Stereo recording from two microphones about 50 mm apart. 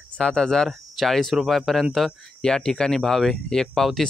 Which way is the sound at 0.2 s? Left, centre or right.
Centre.